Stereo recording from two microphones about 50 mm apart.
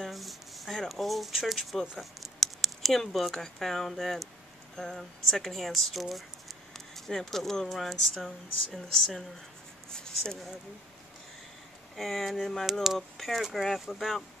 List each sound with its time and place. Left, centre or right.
0.0 s speech: centre
12.0 s speech: centre
12.8 s speech: centre